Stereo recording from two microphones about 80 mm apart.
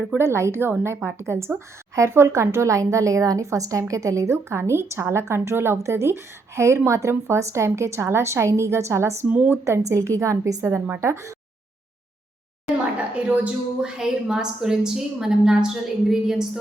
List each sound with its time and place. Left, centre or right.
0.2 s speech: right
9.3 s a woman's voice: centre
9.6 s speech: right
13.1 s a woman's voice: centre